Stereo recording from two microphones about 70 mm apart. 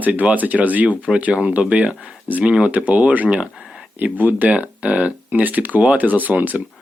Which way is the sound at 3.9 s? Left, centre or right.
Right.